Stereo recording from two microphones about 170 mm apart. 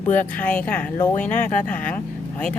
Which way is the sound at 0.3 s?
10° left (ahead or behind).